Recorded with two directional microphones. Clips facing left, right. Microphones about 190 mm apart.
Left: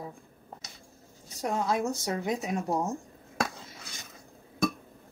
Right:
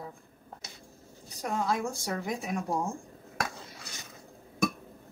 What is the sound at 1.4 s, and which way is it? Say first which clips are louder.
Speech: left 2 dB; 20° left (ahead or behind).